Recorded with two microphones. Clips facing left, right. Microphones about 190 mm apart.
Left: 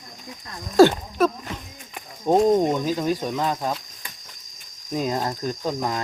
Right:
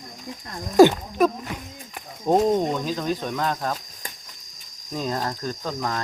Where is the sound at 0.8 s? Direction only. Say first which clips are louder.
Right 1 dB; 15° right (ahead or behind).